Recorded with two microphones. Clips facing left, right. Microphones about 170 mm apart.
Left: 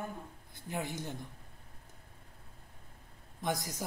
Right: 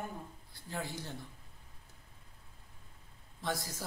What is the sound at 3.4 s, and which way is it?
Speech, 20° left (ahead or behind).